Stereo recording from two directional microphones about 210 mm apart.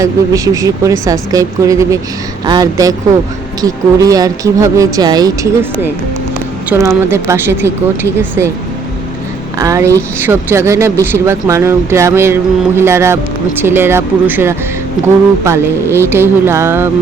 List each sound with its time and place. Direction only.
0.0 s speech: 15° right (ahead or behind)
6.7 s speech: 15° right (ahead or behind)
9.6 s speech: 15° right (ahead or behind)